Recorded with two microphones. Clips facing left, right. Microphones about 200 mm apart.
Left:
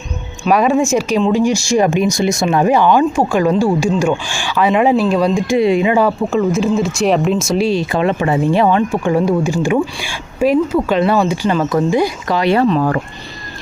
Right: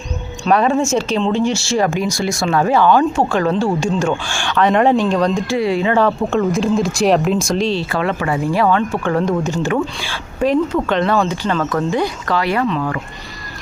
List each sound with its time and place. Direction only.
0.4 s speech: 10° left (ahead or behind)
12.5 s speech: 35° left (ahead or behind)